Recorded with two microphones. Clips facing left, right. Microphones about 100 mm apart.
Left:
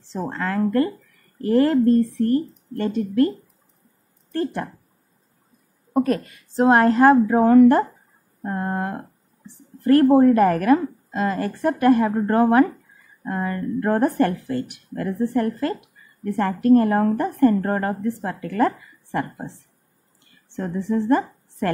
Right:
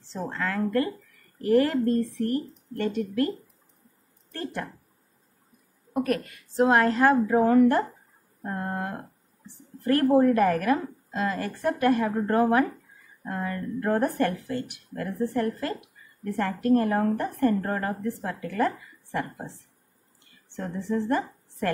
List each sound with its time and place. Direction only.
0.1 s a woman's voice: 35° left (ahead or behind)
4.3 s speech: 35° left (ahead or behind)
5.9 s a woman's voice: 30° left (ahead or behind)
16.9 s a woman's voice: 50° left (ahead or behind)
20.5 s a woman's voice: 45° left (ahead or behind)